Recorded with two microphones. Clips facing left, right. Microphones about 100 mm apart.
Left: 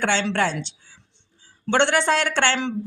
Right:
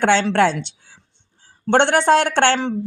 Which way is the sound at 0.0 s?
50° right (ahead or behind).